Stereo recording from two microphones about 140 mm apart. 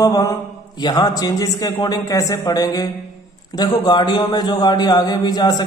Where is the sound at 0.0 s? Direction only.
25° left (ahead or behind).